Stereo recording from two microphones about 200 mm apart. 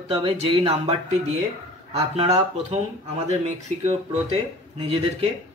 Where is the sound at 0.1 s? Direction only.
30° right (ahead or behind).